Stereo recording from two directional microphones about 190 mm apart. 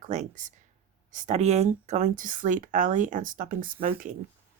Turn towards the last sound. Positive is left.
turn(degrees=-45)  # may be behind; listen again after turning